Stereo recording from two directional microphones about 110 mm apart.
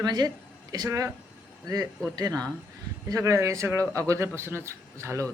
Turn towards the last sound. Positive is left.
turn(degrees=-25)  # may be behind; listen again after turning